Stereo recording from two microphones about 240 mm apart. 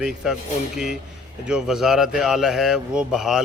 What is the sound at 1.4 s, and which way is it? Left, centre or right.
Speech, centre.